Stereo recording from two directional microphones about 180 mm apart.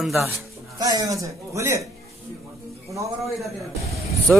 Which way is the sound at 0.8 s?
20° right (ahead or behind).